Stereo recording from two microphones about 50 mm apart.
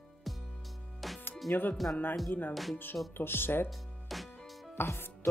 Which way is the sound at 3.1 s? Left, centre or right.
Left.